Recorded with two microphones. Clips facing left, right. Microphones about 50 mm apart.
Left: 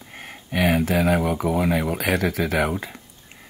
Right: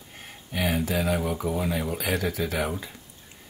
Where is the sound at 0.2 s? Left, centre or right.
Left.